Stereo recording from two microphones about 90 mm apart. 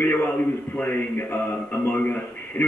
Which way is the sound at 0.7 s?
25° left (ahead or behind).